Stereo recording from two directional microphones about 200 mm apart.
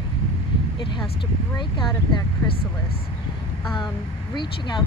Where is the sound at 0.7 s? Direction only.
25° left (ahead or behind).